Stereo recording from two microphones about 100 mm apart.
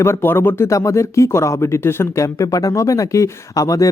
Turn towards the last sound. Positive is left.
turn(degrees=35)  # may be behind; listen again after turning